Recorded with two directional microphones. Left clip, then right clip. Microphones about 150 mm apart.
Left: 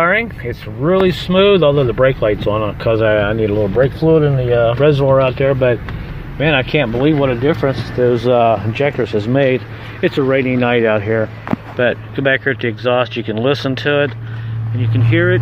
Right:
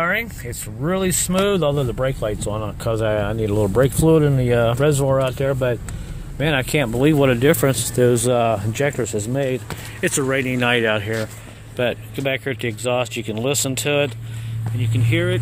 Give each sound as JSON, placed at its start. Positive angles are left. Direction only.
{"t": 0.0, "sound": "speech", "side_deg": -10}
{"t": 3.5, "sound": "speech", "side_deg": -50}
{"t": 4.6, "sound": "speech", "side_deg": -30}
{"t": 6.4, "sound": "speech", "side_deg": -30}
{"t": 8.1, "sound": "speech", "side_deg": -35}